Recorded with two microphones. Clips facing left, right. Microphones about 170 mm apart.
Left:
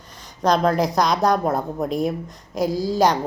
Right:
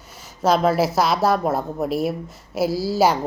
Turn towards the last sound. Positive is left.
turn(degrees=-5)  # may be behind; listen again after turning